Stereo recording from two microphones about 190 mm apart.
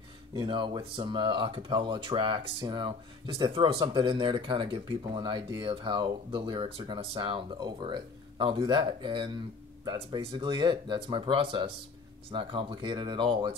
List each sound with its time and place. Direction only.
0.3 s speech: 25° right (ahead or behind)